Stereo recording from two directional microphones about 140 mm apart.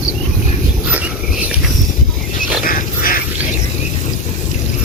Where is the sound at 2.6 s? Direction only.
80° left.